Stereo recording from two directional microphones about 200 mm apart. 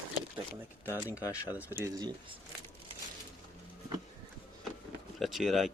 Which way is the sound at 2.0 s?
20° right (ahead or behind).